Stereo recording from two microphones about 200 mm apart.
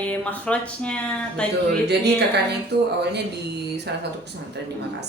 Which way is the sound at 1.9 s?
55° right (ahead or behind).